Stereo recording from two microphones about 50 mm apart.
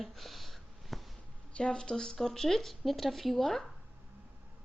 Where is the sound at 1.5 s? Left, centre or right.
Left; by 3.7 s centre.